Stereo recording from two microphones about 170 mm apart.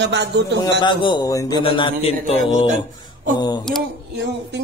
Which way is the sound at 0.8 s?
25° left (ahead or behind).